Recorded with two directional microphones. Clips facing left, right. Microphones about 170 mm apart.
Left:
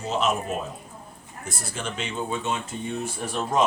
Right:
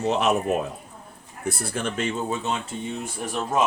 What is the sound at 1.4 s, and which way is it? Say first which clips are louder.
Speech: right 6 dB; 55° right (ahead or behind).